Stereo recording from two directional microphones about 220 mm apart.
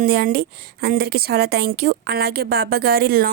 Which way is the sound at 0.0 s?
40° right (ahead or behind).